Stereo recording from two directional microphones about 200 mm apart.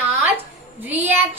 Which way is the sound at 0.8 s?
10° right (ahead or behind).